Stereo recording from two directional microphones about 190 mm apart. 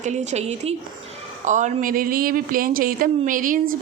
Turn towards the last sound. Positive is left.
turn(degrees=-45)  # may be behind; listen again after turning